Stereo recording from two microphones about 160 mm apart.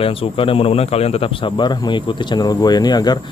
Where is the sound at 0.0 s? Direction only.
35° left (ahead or behind).